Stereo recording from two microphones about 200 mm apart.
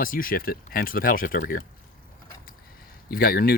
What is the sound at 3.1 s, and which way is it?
Speech, 45° left (ahead or behind).